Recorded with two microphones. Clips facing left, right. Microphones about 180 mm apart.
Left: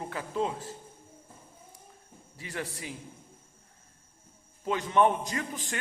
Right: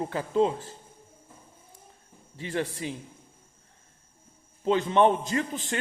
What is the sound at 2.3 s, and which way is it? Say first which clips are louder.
Speech: right 7 dB; 30° right (ahead or behind).